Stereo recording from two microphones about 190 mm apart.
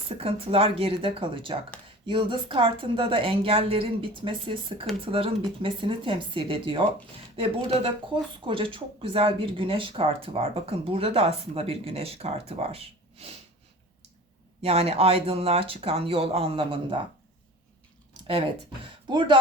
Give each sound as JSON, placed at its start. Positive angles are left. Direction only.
{"t": 0.1, "sound": "a woman's voice", "side_deg": -30}
{"t": 14.6, "sound": "speech", "side_deg": -30}
{"t": 19.0, "sound": "speech", "side_deg": -25}